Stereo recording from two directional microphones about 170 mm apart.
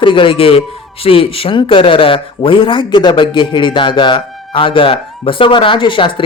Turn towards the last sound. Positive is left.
turn(degrees=30)  # may be behind; listen again after turning